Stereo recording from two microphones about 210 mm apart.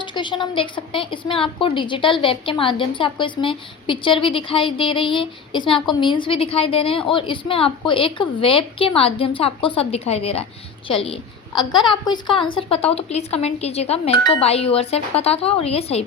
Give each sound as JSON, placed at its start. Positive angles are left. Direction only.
{"t": 0.0, "sound": "a woman's voice", "side_deg": 20}